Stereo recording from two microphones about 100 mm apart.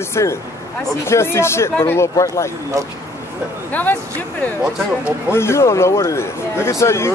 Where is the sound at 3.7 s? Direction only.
20° left (ahead or behind).